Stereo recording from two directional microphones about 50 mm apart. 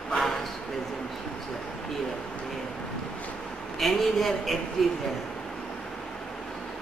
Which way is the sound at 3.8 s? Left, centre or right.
Centre.